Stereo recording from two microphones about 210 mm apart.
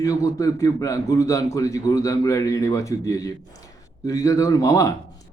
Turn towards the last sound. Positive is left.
turn(degrees=15)  # may be behind; listen again after turning